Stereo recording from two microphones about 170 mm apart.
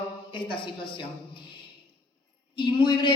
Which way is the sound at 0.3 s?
30° left (ahead or behind).